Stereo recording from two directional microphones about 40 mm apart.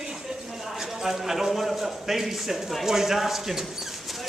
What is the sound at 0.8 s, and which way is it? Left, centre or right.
A man's voice, centre.